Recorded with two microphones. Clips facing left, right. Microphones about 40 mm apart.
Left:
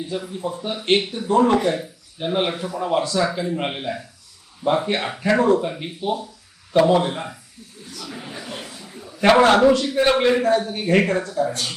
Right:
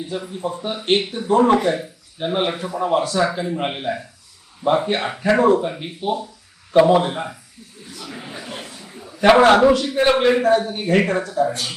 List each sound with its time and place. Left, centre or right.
0.1 s a man's voice: centre